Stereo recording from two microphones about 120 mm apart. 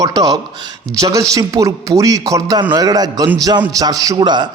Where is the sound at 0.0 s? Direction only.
30° right (ahead or behind).